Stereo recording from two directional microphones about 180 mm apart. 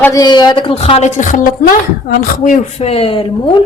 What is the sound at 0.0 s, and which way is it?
Speech, 20° left (ahead or behind).